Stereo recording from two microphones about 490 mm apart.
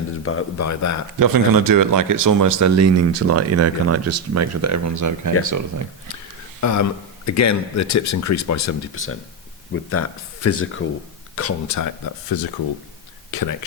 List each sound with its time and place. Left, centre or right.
0.2 s speech: left
1.2 s speech: right
6.6 s speech: left